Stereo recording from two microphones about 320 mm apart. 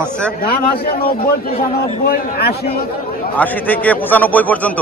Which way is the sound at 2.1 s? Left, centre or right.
Left.